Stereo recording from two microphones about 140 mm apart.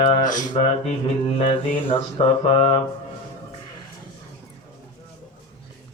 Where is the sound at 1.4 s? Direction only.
45° left (ahead or behind).